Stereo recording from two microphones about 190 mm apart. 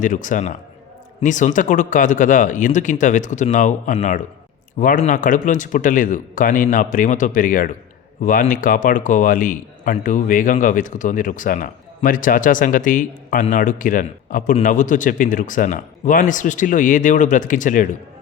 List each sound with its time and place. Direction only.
0.0 s a man's voice: 40° left (ahead or behind)